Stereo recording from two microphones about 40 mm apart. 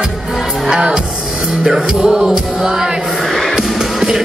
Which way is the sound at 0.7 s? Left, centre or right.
Right.